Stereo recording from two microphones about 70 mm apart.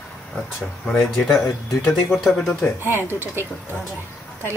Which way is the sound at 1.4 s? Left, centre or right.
Centre.